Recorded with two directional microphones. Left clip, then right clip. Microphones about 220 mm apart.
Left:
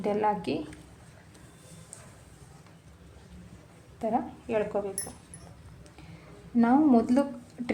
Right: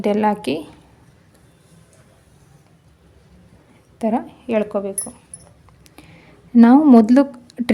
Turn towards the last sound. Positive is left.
turn(degrees=-50)  # may be behind; listen again after turning